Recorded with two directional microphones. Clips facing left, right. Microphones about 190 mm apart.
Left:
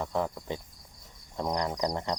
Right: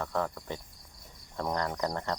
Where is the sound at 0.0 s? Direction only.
15° left (ahead or behind).